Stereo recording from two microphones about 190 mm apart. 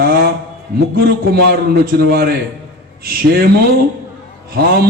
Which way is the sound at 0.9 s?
60° right (ahead or behind).